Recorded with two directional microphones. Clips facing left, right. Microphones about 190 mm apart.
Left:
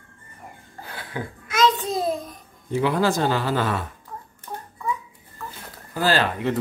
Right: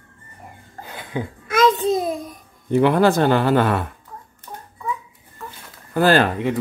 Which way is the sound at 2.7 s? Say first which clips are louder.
Right 6 dB; 60° right (ahead or behind).